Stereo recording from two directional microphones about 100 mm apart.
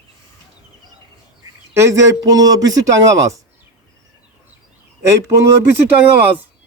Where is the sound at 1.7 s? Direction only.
30° right (ahead or behind).